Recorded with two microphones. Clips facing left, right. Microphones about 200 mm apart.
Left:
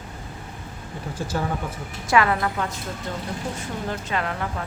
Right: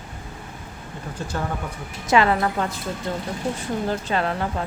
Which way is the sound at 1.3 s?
5° left (ahead or behind).